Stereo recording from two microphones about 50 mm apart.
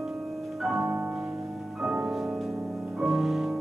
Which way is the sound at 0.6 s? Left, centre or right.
Centre.